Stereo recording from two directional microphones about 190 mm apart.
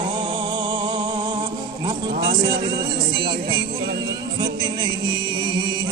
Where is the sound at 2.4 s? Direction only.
25° right (ahead or behind).